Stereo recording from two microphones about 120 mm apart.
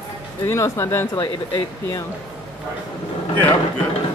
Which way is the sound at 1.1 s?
35° left (ahead or behind).